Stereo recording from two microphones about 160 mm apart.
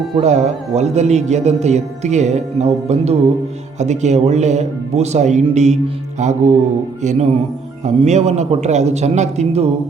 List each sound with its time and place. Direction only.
0.2 s a man's voice: 45° right (ahead or behind)